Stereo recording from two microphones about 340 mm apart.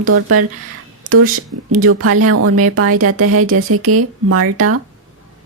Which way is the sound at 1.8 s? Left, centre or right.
Right.